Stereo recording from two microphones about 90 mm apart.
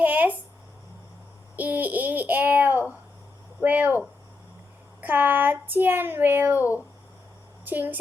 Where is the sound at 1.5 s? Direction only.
20° right (ahead or behind).